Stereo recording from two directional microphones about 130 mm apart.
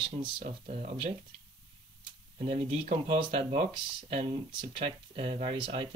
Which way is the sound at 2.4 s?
55° right (ahead or behind).